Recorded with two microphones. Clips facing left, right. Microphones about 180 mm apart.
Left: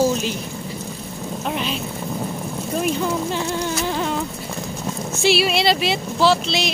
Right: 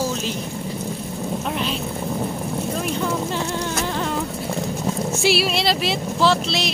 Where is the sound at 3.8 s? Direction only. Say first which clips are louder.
Left 2 dB; 5° left (ahead or behind).